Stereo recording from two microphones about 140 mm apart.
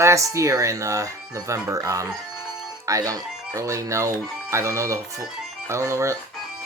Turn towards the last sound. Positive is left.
turn(degrees=-20)  # may be behind; listen again after turning